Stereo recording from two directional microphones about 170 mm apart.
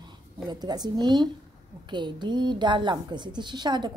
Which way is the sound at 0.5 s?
25° right (ahead or behind).